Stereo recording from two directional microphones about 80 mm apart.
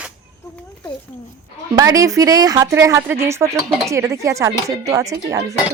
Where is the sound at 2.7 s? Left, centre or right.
Right.